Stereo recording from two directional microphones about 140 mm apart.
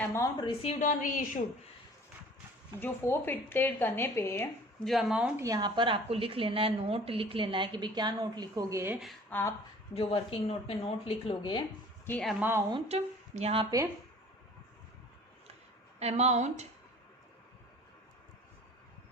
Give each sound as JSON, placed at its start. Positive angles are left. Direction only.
{"t": 0.0, "sound": "a woman's voice", "side_deg": 20}
{"t": 0.6, "sound": "speech", "side_deg": 50}
{"t": 0.9, "sound": "a woman's voice", "side_deg": 70}
{"t": 2.8, "sound": "speech", "side_deg": 15}
{"t": 4.8, "sound": "speech", "side_deg": 0}
{"t": 5.4, "sound": "a woman's voice", "side_deg": -25}
{"t": 9.3, "sound": "speech", "side_deg": 15}
{"t": 9.9, "sound": "speech", "side_deg": 45}
{"t": 12.4, "sound": "a woman's voice", "side_deg": -15}
{"t": 12.9, "sound": "speech", "side_deg": -50}
{"t": 16.0, "sound": "speech", "side_deg": -50}